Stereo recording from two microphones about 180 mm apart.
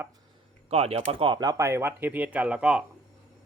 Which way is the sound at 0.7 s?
35° right (ahead or behind).